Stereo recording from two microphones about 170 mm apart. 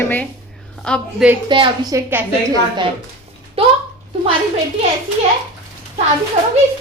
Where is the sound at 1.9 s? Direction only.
10° right (ahead or behind).